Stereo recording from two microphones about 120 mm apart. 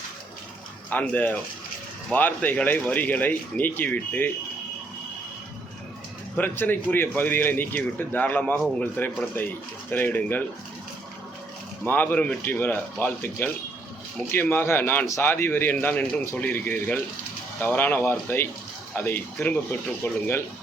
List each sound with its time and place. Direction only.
0.9 s speech: 15° left (ahead or behind)
6.3 s speech: 15° left (ahead or behind)
11.9 s speech: 15° left (ahead or behind)